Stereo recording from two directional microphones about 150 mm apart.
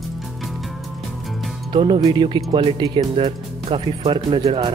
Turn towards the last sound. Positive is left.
turn(degrees=-35)  # may be behind; listen again after turning